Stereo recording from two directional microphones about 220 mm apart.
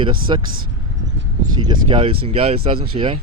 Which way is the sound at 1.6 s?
25° right (ahead or behind).